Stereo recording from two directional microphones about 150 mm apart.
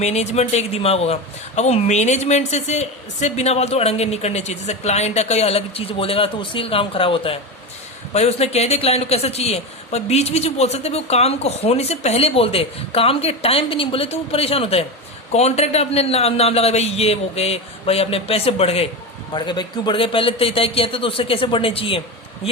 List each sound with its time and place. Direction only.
0.0 s speech: 50° left (ahead or behind)
19.3 s a man's voice: 30° left (ahead or behind)